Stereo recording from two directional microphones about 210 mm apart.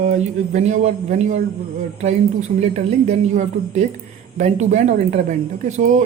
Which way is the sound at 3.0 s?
35° right (ahead or behind).